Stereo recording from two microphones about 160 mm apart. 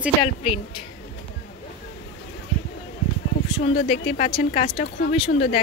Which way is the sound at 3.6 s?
40° left (ahead or behind).